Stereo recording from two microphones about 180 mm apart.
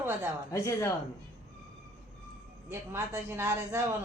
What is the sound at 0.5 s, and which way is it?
Speech, 15° left (ahead or behind).